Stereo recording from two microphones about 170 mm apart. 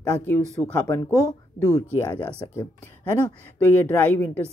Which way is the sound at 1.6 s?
20° left (ahead or behind).